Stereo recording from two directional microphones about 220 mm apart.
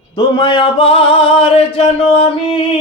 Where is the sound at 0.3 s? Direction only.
20° left (ahead or behind).